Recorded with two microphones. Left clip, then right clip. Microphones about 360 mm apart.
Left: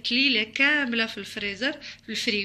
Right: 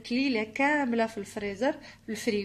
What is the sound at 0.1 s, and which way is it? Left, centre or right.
A woman's voice, centre.